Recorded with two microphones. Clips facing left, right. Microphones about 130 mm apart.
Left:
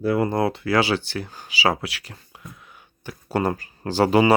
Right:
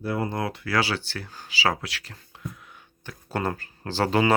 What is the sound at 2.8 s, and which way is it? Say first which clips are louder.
Speech: left 7 dB; 10° left (ahead or behind).